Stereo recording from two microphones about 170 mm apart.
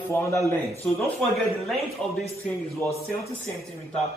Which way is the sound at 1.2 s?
Centre (ahead or behind).